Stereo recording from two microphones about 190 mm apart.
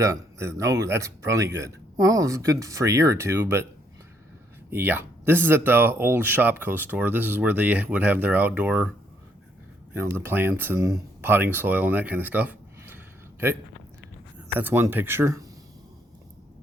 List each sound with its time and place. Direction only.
0.0 s speech: 15° right (ahead or behind)
4.7 s speech: 10° right (ahead or behind)
9.9 s speech: 10° right (ahead or behind)
14.6 s speech: 10° right (ahead or behind)